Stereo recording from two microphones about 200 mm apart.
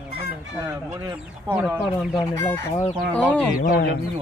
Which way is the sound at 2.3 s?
15° left (ahead or behind).